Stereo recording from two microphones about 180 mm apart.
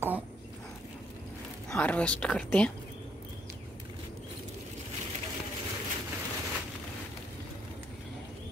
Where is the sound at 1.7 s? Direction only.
10° left (ahead or behind).